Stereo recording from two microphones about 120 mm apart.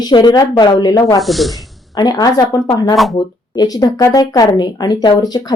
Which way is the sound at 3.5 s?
35° left (ahead or behind).